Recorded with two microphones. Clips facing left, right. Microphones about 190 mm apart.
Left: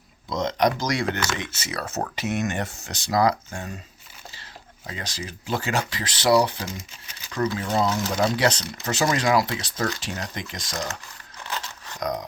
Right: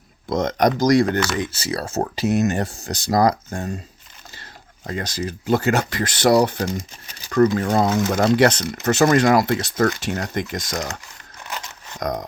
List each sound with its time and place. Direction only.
0.3 s speech: 50° right (ahead or behind)
4.9 s speech: 45° right (ahead or behind)
11.9 s speech: 45° right (ahead or behind)